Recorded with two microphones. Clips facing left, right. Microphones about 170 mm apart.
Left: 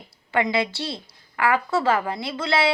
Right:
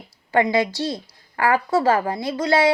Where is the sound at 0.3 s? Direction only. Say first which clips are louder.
Right 4 dB; 40° right (ahead or behind).